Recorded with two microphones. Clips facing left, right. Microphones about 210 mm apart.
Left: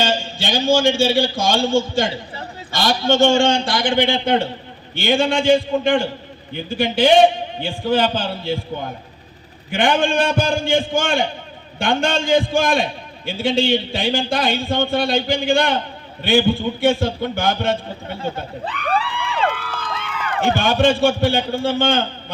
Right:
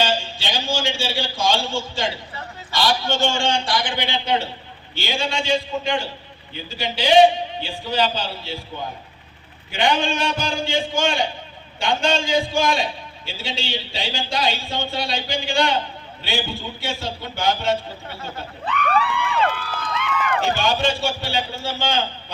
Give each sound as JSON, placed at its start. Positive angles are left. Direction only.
{"t": 0.0, "sound": "a man's voice", "side_deg": 45}
{"t": 2.9, "sound": "a man's voice", "side_deg": 25}
{"t": 3.3, "sound": "a man's voice", "side_deg": 45}
{"t": 9.7, "sound": "a man's voice", "side_deg": 50}
{"t": 18.6, "sound": "a sound", "side_deg": 35}
{"t": 20.4, "sound": "a man's voice", "side_deg": 55}